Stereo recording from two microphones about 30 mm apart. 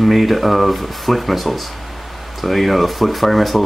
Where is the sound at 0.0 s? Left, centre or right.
Centre.